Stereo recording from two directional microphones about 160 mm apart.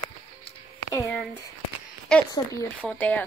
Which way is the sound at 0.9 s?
15° left (ahead or behind).